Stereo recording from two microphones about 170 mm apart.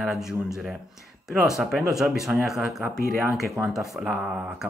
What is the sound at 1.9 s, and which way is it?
Speech, centre (ahead or behind).